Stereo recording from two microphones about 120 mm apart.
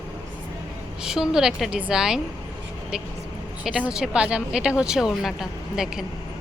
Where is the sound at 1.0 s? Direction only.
5° right (ahead or behind).